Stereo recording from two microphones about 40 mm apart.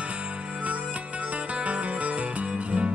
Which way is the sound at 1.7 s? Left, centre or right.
Right.